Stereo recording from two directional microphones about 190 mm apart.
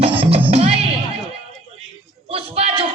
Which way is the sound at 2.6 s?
30° right (ahead or behind).